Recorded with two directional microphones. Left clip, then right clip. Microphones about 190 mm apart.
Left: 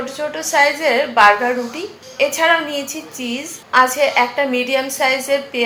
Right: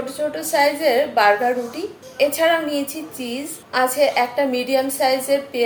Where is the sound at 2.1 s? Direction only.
5° right (ahead or behind).